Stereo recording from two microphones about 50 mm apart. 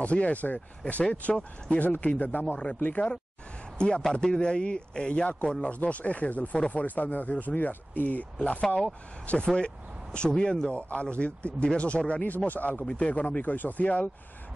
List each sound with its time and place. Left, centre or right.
0.0 s a man's voice: left
3.7 s a man's voice: centre